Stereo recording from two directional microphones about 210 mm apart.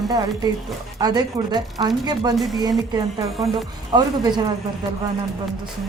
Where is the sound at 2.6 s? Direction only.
20° right (ahead or behind).